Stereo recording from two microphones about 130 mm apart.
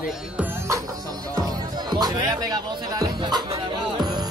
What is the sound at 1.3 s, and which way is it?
Music, 30° right (ahead or behind).